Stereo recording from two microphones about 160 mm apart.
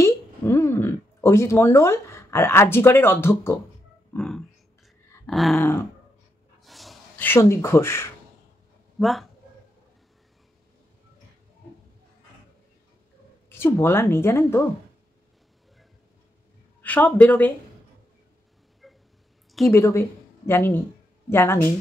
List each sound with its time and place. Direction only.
0.0 s a sound: 15° left (ahead or behind)
4.2 s a sound: 5° left (ahead or behind)
5.6 s speech: 15° left (ahead or behind)
6.6 s snort: centre (ahead or behind)
7.2 s speech: 15° left (ahead or behind)
9.0 s speech: centre (ahead or behind)
13.5 s speech: 15° left (ahead or behind)
16.8 s speech: 10° left (ahead or behind)
19.7 s speech: 15° left (ahead or behind)